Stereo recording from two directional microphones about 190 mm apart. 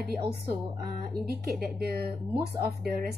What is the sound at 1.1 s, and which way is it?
A woman's voice, 55° right (ahead or behind).